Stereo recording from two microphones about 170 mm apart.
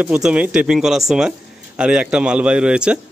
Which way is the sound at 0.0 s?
5° right (ahead or behind).